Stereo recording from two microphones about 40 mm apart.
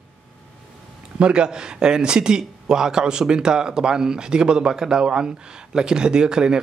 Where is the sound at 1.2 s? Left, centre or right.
Right.